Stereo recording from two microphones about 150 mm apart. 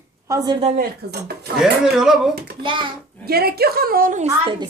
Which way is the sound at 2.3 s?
90° right.